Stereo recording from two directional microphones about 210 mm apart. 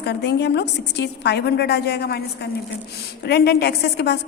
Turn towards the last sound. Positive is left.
turn(degrees=50)  # may be behind; listen again after turning